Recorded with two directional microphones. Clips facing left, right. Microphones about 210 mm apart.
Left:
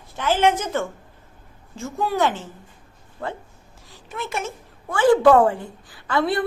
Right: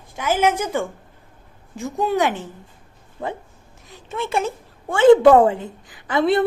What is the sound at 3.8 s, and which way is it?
A woman's voice, 25° right (ahead or behind).